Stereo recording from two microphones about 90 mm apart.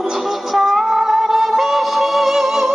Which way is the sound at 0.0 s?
5° right (ahead or behind).